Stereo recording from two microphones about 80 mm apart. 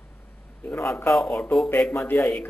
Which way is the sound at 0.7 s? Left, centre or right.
Left.